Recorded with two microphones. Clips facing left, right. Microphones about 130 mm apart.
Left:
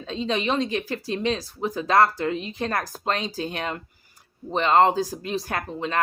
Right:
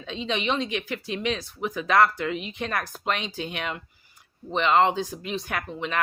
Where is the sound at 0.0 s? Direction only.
35° left (ahead or behind).